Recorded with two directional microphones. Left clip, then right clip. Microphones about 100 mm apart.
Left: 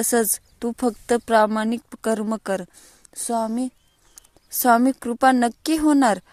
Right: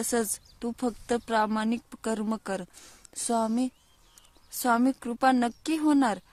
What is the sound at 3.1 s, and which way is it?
Speech, 20° left (ahead or behind).